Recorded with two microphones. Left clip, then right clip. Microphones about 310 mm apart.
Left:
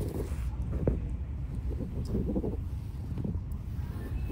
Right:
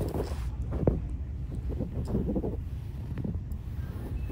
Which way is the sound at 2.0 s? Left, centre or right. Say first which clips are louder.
Right 1 dB; centre.